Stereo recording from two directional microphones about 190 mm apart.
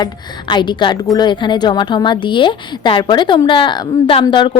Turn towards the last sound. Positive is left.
turn(degrees=25)  # may be behind; listen again after turning